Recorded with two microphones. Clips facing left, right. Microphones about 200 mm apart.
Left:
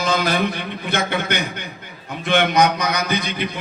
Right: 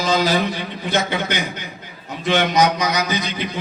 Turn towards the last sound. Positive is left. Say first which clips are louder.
# even
turn(degrees=60)  # may be behind; listen again after turning